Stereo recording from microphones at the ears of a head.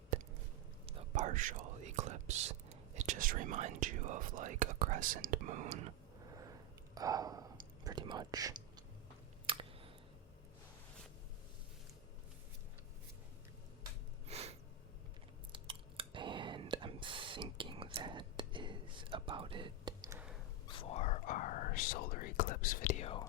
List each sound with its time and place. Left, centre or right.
0.9 s whispering: right
16.1 s whispering: right
20.7 s whispering: left